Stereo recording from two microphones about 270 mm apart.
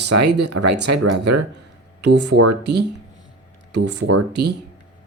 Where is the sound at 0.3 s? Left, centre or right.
Right.